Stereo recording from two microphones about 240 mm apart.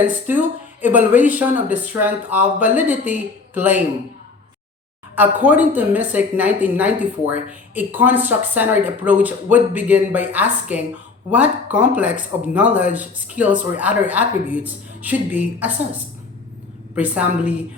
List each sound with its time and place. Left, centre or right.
0.1 s a woman's voice: centre
5.1 s a woman's voice: centre
16.9 s speech: centre